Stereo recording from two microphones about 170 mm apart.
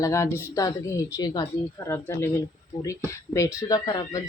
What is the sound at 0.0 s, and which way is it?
Speech, 15° left (ahead or behind).